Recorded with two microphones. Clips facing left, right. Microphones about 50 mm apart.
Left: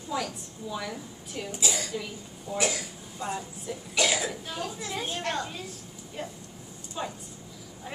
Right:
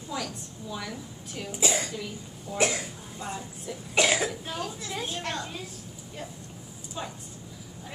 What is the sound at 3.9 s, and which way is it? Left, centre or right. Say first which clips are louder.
Speech: right 3 dB; right.